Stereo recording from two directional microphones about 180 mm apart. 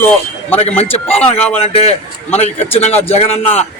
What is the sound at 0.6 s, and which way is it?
Speech, 35° left (ahead or behind).